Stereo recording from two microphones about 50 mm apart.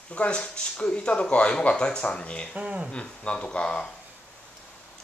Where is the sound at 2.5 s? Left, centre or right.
Right.